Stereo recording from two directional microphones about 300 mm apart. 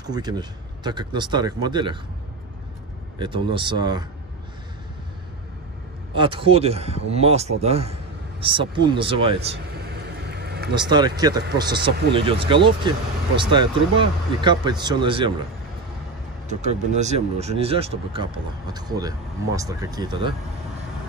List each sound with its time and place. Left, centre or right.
0.0 s speech: centre
3.2 s speech: centre
6.1 s speech: centre
9.8 s vehicle: right
10.7 s speech: centre
16.4 s speech: right